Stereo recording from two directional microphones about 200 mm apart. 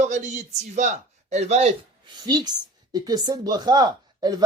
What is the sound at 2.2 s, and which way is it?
Speech, 20° right (ahead or behind).